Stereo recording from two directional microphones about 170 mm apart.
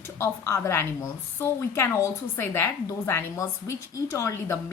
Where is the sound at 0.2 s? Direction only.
15° left (ahead or behind).